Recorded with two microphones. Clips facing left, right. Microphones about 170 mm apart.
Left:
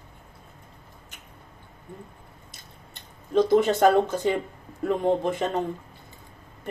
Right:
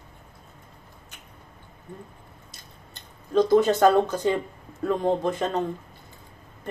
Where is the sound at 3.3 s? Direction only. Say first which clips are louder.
Right 1 dB; 20° left (ahead or behind).